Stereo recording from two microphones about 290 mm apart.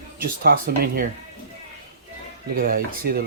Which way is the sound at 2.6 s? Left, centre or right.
Right.